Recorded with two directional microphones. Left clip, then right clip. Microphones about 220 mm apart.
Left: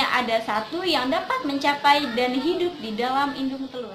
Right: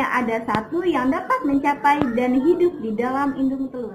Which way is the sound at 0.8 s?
25° left (ahead or behind).